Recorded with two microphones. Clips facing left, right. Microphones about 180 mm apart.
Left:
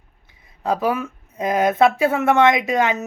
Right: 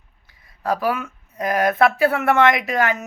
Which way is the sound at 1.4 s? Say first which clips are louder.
Left 1 dB; 20° left (ahead or behind).